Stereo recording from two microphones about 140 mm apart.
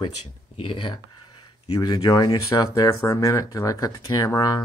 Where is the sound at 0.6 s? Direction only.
35° left (ahead or behind).